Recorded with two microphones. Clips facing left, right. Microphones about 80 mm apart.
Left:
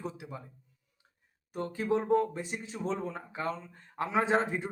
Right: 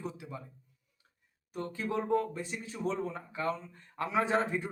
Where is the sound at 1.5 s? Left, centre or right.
Left.